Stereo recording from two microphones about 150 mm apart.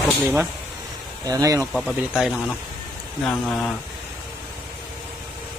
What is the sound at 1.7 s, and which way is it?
Speech, centre (ahead or behind).